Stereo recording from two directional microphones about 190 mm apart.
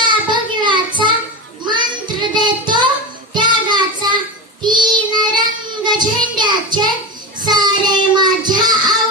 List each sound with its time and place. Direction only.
0.0 s child singing: 25° right (ahead or behind)